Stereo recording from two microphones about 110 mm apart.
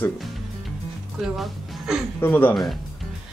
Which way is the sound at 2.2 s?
15° left (ahead or behind).